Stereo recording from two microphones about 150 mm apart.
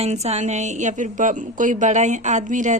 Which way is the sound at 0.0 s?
45° right (ahead or behind).